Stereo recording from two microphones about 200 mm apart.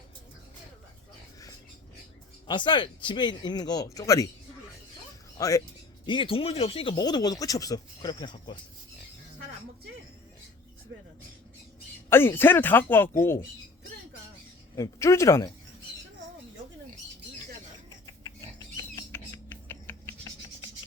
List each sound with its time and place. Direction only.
2.5 s speech: 25° left (ahead or behind)
5.4 s speech: 15° left (ahead or behind)
6.1 s speech: 25° left (ahead or behind)
12.0 s speech: 10° left (ahead or behind)
14.8 s speech: 15° left (ahead or behind)
18.0 s a sound: 20° left (ahead or behind)